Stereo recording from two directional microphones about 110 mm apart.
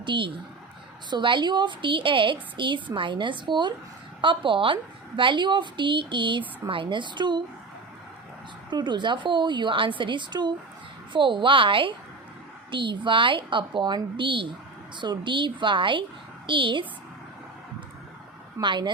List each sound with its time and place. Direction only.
0.0 s a woman's voice: 45° right (ahead or behind)
8.7 s a woman's voice: 45° right (ahead or behind)
18.6 s a woman's voice: 45° right (ahead or behind)